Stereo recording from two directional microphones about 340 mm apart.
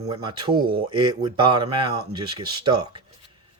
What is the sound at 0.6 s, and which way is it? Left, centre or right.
Speech, right.